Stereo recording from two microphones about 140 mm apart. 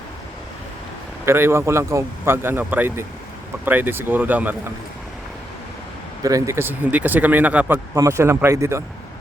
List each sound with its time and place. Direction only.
1.2 s speech: 15° right (ahead or behind)
6.2 s speech: 25° right (ahead or behind)
7.9 s speech: 20° right (ahead or behind)